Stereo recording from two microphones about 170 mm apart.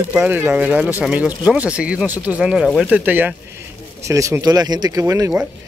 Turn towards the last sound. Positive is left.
turn(degrees=-15)  # may be behind; listen again after turning